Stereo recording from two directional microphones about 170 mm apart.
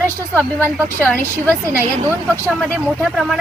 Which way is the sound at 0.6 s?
10° right (ahead or behind).